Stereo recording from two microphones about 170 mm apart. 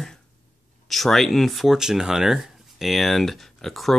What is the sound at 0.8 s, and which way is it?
Speech, centre (ahead or behind).